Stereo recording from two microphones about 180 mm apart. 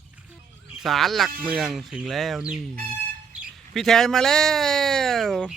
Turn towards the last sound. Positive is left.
turn(degrees=0)  # may be behind; listen again after turning